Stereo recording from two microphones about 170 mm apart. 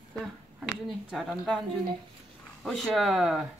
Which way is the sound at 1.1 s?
Centre (ahead or behind).